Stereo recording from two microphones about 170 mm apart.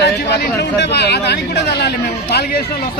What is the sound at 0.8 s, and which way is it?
Speech, 80° left.